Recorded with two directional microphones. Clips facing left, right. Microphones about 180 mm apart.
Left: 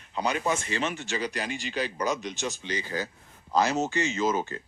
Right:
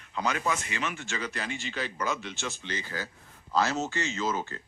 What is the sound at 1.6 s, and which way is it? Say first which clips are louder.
Speech: left 4 dB; 15° left (ahead or behind).